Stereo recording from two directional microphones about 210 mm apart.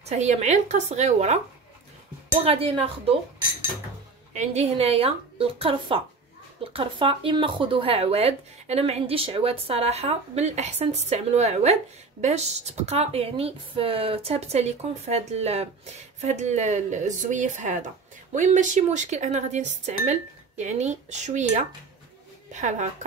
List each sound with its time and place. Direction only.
0.0 s speech: 35° right (ahead or behind)
2.4 s speech: 25° right (ahead or behind)
4.3 s speech: 30° right (ahead or behind)